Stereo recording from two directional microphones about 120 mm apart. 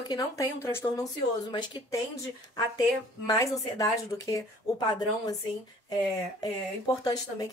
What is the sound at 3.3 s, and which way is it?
A woman's voice, 30° left (ahead or behind).